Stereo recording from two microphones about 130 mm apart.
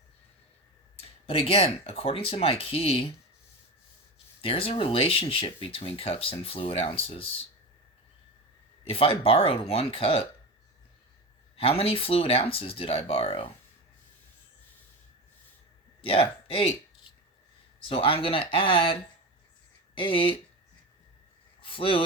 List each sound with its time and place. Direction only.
0.9 s speech: 50° left (ahead or behind)
4.4 s speech: 45° left (ahead or behind)
8.9 s speech: 45° left (ahead or behind)
11.5 s speech: 50° left (ahead or behind)
16.0 s speech: 45° left (ahead or behind)
20.0 s speech: 40° left (ahead or behind)
21.6 s speech: 40° left (ahead or behind)